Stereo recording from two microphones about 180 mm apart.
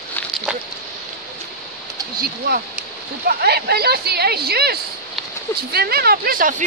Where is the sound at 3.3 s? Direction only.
60° right (ahead or behind).